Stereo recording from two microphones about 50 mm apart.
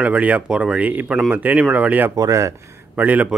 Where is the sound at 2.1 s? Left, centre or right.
Right.